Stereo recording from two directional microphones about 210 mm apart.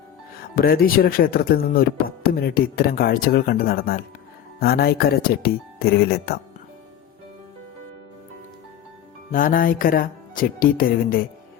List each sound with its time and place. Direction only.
0.5 s speech: 45° left (ahead or behind)
9.3 s speech: 40° left (ahead or behind)